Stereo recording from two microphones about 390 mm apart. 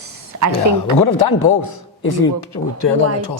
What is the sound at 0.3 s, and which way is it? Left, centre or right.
Speech, right.